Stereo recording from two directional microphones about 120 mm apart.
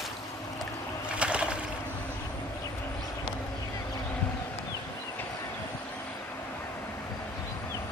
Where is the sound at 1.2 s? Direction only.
10° right (ahead or behind).